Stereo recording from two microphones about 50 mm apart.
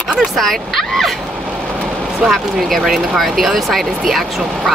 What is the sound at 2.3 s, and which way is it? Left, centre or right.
Speech, centre.